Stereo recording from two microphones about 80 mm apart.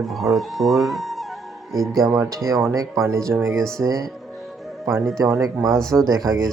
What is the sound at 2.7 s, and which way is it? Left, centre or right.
Speech, right.